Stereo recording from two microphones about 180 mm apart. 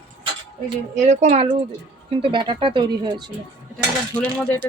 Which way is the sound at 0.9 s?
40° right (ahead or behind).